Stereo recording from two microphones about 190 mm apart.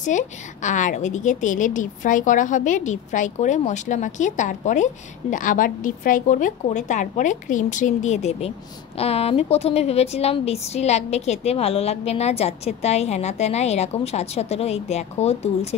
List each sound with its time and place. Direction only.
0.0 s a woman's voice: 40° left (ahead or behind)